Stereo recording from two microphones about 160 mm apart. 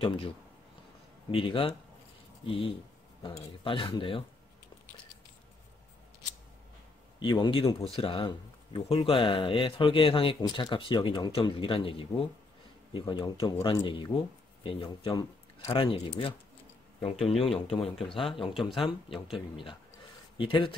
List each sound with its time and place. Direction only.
0.0 s speech: 35° left (ahead or behind)
1.3 s speech: 35° left (ahead or behind)
7.2 s speech: 30° left (ahead or behind)
18.5 s speech: centre (ahead or behind)
18.8 s speech: 30° left (ahead or behind)
20.3 s speech: 30° left (ahead or behind)